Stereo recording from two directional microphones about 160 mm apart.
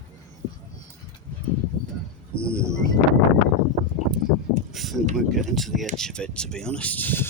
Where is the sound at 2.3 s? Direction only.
70° left (ahead or behind).